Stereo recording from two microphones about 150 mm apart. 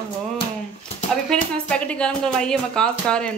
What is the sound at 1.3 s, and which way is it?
Speech, 5° left (ahead or behind).